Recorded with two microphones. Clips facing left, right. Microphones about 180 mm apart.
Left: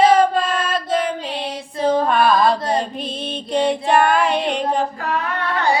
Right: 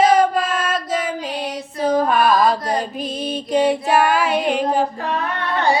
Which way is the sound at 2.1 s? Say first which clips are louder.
Even; 5° right (ahead or behind).